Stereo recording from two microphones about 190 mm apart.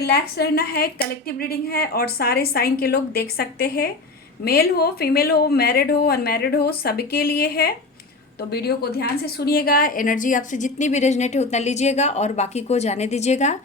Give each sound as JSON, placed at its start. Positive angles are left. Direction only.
{"t": 0.0, "sound": "a woman's voice", "side_deg": 55}